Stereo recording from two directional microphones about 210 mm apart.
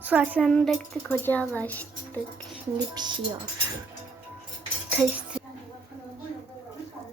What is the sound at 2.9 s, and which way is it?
Speech, 20° right (ahead or behind).